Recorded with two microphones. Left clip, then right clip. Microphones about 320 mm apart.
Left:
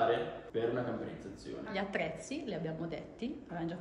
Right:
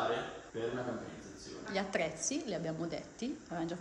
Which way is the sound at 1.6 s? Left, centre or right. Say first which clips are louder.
Right 1 dB; centre.